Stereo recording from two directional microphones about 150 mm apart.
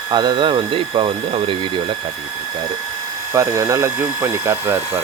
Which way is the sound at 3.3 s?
25° right (ahead or behind).